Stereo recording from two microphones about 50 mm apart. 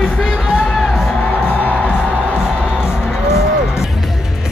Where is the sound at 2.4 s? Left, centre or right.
Centre.